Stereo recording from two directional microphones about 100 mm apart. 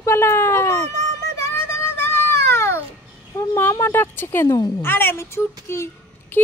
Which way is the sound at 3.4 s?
20° left (ahead or behind).